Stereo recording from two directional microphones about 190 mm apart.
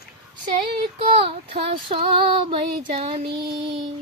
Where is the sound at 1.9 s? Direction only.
30° right (ahead or behind).